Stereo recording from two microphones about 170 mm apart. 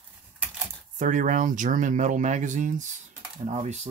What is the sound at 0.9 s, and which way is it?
Speech, 50° right (ahead or behind).